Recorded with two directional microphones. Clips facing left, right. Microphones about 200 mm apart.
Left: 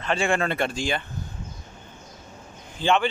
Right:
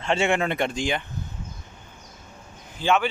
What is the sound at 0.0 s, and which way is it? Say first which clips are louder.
Speech: right 1 dB; 25° right (ahead or behind).